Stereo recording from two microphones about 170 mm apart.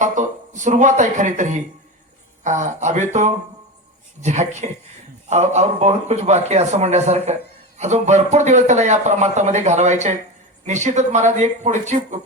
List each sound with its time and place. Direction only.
0.0 s a man's voice: 45° right (ahead or behind)